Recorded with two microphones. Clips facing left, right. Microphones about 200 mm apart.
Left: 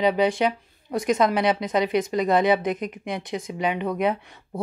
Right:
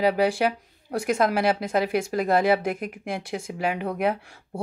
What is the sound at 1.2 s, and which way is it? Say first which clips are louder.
Speech: right 1 dB; 5° right (ahead or behind).